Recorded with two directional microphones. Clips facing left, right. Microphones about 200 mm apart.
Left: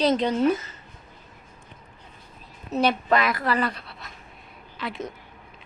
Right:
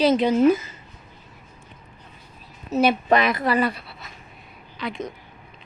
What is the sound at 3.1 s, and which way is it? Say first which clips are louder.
Speech: right 3 dB; 20° right (ahead or behind).